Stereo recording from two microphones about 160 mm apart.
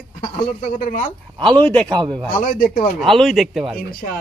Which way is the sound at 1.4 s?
10° left (ahead or behind).